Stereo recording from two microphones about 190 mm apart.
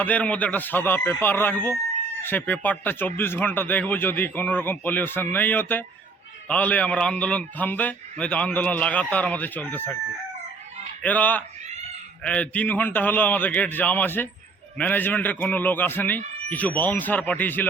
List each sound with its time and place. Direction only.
0.0 s speech: 10° left (ahead or behind)
11.0 s speech: 10° left (ahead or behind)